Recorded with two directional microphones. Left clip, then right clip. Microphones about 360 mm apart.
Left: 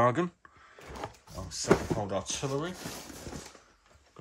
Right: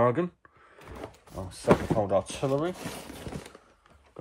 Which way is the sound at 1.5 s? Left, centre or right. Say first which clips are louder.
Right 3 dB; centre.